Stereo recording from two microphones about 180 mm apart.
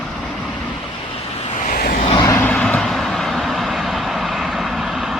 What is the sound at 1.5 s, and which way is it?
Vehicle, 45° left (ahead or behind).